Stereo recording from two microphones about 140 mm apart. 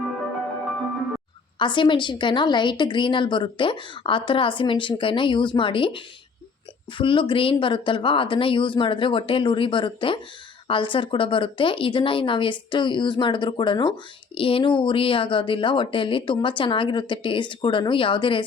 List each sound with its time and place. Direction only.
1.5 s a woman's voice: 35° left (ahead or behind)